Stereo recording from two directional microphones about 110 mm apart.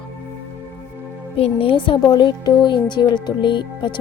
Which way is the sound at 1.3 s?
60° left (ahead or behind).